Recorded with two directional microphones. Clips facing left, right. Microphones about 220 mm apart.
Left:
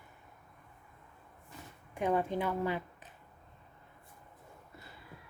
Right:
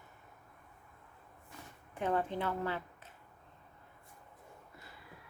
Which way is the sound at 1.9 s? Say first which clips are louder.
Left 3 dB; 15° left (ahead or behind).